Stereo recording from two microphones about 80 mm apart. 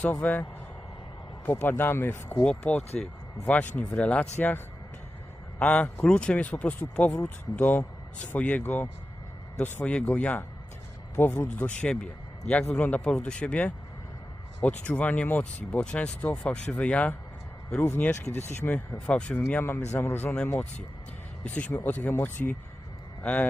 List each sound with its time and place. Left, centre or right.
0.0 s speech: centre
1.5 s speech: left
2.4 s speech: centre; by 18.7 s left
18.9 s speech: centre
19.6 s speech: left
21.4 s speech: centre